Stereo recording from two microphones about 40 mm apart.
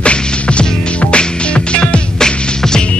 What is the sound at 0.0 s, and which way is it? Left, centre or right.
Music, left.